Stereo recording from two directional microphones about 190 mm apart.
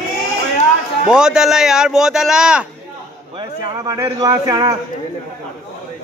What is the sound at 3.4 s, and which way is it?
A man's voice, 20° right (ahead or behind).